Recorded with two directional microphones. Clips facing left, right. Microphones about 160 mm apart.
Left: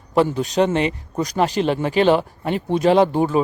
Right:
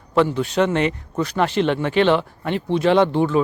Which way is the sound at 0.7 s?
25° left (ahead or behind).